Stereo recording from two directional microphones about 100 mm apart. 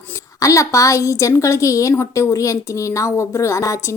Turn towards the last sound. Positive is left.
turn(degrees=30)  # may be behind; listen again after turning